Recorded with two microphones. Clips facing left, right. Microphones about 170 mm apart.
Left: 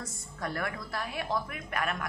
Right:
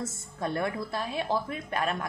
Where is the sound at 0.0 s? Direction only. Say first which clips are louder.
Right 5 dB; 25° right (ahead or behind).